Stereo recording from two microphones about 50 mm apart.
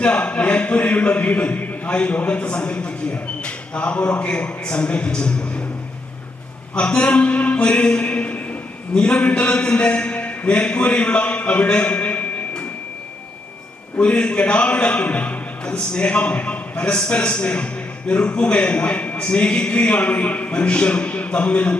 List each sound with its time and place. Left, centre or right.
0.0 s a man's voice: left
6.7 s a man's voice: left
14.0 s a man's voice: left